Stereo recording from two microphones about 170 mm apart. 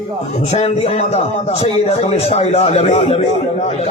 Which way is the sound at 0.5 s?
40° left (ahead or behind).